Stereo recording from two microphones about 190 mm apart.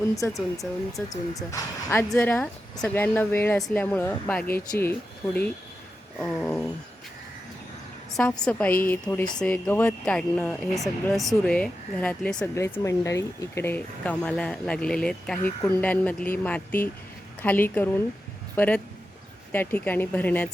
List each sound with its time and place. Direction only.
0.2 s speech: 15° left (ahead or behind)
8.1 s speech: 5° left (ahead or behind)